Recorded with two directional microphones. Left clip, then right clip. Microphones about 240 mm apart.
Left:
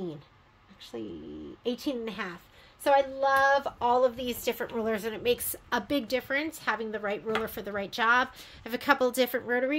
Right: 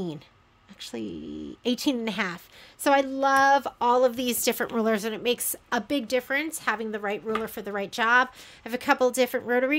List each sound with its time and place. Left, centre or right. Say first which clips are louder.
0.7 s a woman's voice: right 4 dB; right